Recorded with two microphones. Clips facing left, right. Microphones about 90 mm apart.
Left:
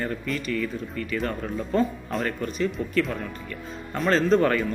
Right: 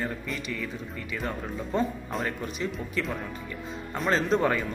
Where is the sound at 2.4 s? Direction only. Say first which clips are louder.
Left 5 dB; 10° right (ahead or behind).